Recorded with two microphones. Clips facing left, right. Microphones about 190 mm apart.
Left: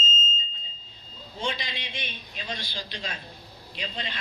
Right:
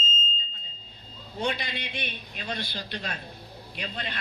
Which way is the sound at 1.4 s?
55° right (ahead or behind).